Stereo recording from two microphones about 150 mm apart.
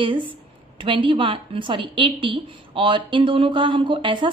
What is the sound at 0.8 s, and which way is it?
A woman's voice, 35° right (ahead or behind).